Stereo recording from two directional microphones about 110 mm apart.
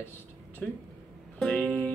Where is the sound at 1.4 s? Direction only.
5° left (ahead or behind).